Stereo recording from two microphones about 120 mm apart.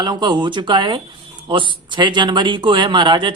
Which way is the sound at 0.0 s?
35° right (ahead or behind).